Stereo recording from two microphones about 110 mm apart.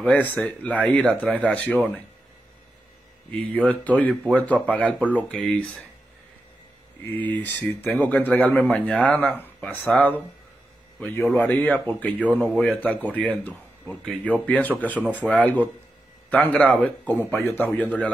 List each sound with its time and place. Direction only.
0.0 s speech: 15° left (ahead or behind)
3.3 s speech: 10° left (ahead or behind)
7.2 s a man's voice: 15° left (ahead or behind)